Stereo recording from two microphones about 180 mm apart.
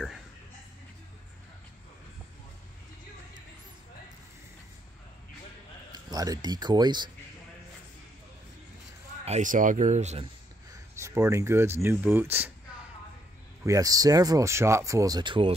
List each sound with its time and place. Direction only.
5.9 s speech: 20° right (ahead or behind)
9.2 s speech: 40° right (ahead or behind)
10.7 s speech: 15° right (ahead or behind)
13.7 s speech: 20° right (ahead or behind)